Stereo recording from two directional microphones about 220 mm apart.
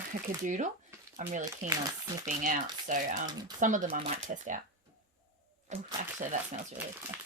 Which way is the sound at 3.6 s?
35° right (ahead or behind).